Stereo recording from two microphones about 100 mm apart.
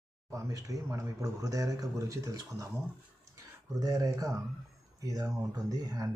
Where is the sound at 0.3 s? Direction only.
35° right (ahead or behind).